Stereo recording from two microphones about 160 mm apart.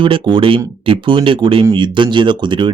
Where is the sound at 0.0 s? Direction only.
30° right (ahead or behind).